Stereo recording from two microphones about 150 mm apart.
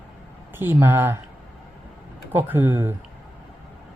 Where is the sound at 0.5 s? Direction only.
15° right (ahead or behind).